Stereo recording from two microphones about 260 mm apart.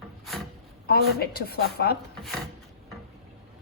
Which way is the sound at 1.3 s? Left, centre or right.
Left.